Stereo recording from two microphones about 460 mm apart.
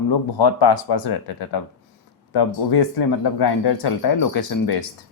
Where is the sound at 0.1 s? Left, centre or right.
Left.